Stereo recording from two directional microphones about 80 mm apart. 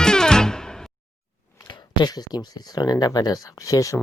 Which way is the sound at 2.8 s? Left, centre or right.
Left.